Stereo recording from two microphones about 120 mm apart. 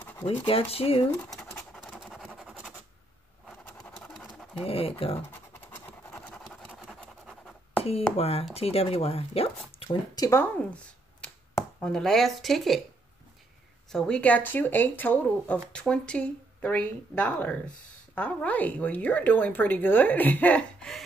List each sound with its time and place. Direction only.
0.0 s scratch: 20° left (ahead or behind)
0.5 s speech: 50° left (ahead or behind)
1.7 s a sound: 5° right (ahead or behind)
3.7 s a sound: centre (ahead or behind)
4.6 s speech: 50° left (ahead or behind)
5.3 s scratch: 15° left (ahead or behind)
6.7 s scratch: 5° right (ahead or behind)
7.0 s scratch: 5° left (ahead or behind)
8.2 s speech: 55° left (ahead or behind)
10.1 s speech: 30° left (ahead or behind)
11.8 s speech: 5° left (ahead or behind)
13.9 s speech: 10° left (ahead or behind)